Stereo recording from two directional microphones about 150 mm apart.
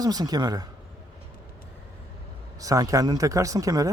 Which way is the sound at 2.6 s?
20° right (ahead or behind).